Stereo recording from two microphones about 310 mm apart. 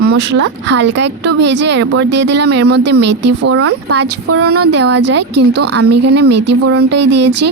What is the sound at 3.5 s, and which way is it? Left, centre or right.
A woman's voice, right.